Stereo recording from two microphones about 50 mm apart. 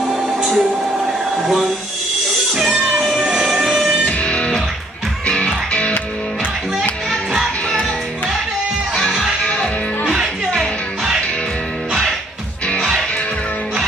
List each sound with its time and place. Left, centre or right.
0.0 s a sound: centre
2.8 s music: centre
3.2 s music: centre
4.2 s music: left
9.4 s music: left
11.9 s music: centre